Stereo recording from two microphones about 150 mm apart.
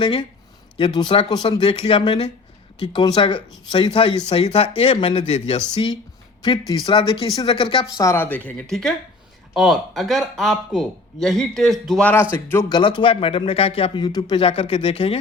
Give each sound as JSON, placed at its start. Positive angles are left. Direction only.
{"t": 0.0, "sound": "speech", "side_deg": 30}
{"t": 8.0, "sound": "speech", "side_deg": 15}
{"t": 9.6, "sound": "speech", "side_deg": 0}
{"t": 12.6, "sound": "speech", "side_deg": 30}